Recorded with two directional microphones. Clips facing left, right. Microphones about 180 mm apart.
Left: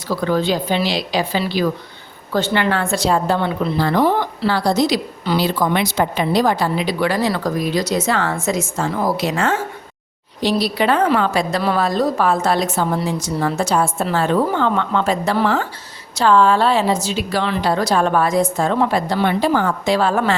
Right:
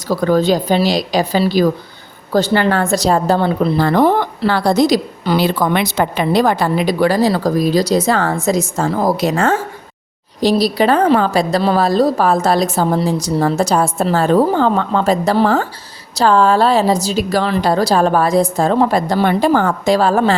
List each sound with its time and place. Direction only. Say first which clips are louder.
0.1 s a woman's voice: right 5 dB; 40° right (ahead or behind)
3.8 s a woman's voice: right 3 dB; 50° right (ahead or behind)